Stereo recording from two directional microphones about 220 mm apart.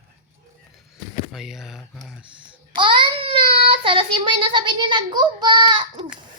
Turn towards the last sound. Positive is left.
turn(degrees=-20)  # may be behind; listen again after turning